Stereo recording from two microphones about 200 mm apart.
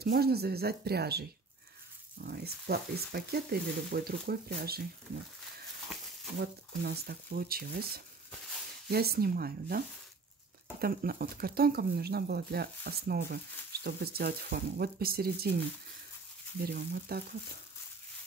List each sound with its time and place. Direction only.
0.0 s speech: 50° right (ahead or behind)
6.4 s speech: 50° right (ahead or behind)
16.6 s speech: 50° right (ahead or behind)